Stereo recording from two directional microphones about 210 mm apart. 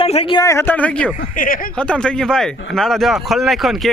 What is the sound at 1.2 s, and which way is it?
Speech, 40° left (ahead or behind).